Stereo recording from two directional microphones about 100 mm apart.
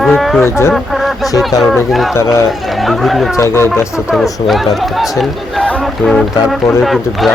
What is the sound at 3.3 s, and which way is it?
Speech, 30° left (ahead or behind).